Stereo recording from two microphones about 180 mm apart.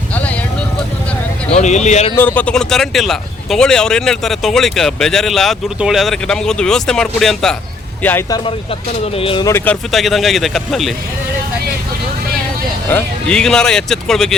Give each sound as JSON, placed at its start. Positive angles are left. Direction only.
{"t": 0.1, "sound": "vehicle", "side_deg": 10}
{"t": 1.5, "sound": "speech", "side_deg": 40}
{"t": 2.1, "sound": "speech", "side_deg": 10}
{"t": 9.1, "sound": "speech", "side_deg": 30}
{"t": 9.5, "sound": "speech", "side_deg": 10}
{"t": 9.9, "sound": "speech", "side_deg": 0}
{"t": 12.9, "sound": "speech", "side_deg": 5}